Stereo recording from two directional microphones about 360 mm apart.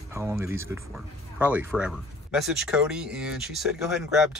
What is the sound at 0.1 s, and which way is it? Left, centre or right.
Speech, centre.